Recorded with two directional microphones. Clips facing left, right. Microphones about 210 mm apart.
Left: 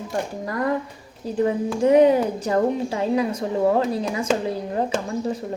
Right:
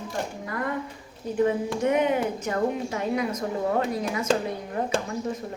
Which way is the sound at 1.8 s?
35° left (ahead or behind).